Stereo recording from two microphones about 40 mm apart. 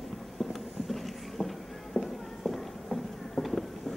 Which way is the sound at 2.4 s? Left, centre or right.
Centre.